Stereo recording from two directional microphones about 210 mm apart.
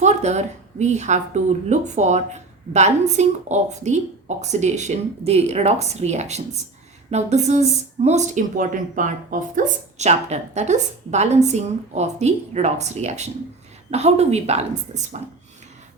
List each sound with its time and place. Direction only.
0.0 s a woman's voice: 30° right (ahead or behind)